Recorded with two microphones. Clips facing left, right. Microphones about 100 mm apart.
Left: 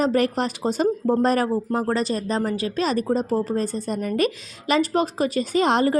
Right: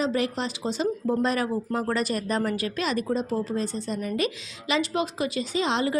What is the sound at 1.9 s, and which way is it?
Speech, 30° left (ahead or behind).